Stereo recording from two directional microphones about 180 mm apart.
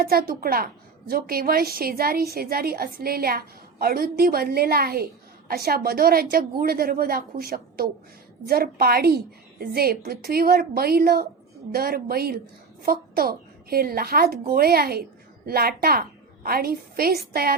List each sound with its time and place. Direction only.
0.0 s a woman's voice: 55° right (ahead or behind)